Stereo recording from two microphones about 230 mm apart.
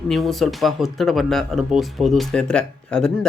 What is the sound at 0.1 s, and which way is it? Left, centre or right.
A man's voice, centre.